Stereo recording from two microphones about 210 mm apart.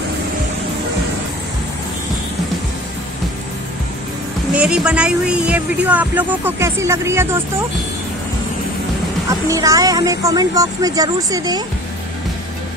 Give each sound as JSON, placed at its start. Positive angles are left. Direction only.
{"t": 4.6, "sound": "speech", "side_deg": -5}
{"t": 9.5, "sound": "speech", "side_deg": -15}